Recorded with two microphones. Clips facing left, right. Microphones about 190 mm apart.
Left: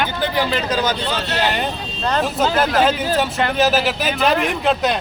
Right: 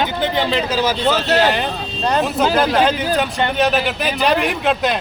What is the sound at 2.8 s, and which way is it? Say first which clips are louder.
Speech: even; 5° left (ahead or behind).